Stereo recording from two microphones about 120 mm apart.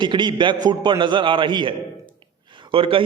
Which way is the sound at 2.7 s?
50° right (ahead or behind).